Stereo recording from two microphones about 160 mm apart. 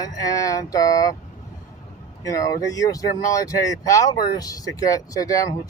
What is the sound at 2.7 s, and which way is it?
Speech, 20° left (ahead or behind).